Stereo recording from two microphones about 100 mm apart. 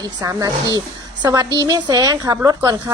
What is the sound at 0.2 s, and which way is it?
A woman's voice, 35° right (ahead or behind).